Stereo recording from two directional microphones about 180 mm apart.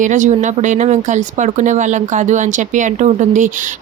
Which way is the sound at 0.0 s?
45° right (ahead or behind).